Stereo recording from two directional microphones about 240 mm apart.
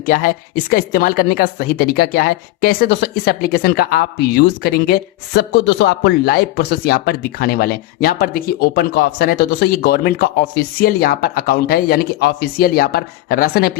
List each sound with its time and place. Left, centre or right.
0.0 s speech: left